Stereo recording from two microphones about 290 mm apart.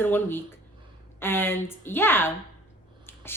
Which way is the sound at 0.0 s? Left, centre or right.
Centre.